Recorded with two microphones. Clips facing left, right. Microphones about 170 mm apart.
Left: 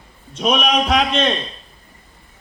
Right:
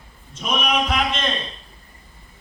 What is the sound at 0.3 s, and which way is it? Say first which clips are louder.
Speech: left 5 dB; 70° left (ahead or behind).